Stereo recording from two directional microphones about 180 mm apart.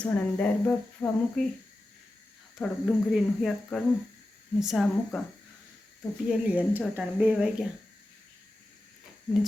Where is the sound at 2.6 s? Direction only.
5° right (ahead or behind).